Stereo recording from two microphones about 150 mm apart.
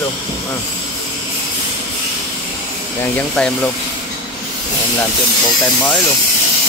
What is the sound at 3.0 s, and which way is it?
Speech, 10° left (ahead or behind).